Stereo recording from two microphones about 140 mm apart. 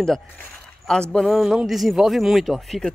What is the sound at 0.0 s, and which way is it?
Speech, 5° left (ahead or behind).